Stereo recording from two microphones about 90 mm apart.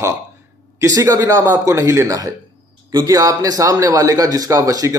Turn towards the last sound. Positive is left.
turn(degrees=-40)  # may be behind; listen again after turning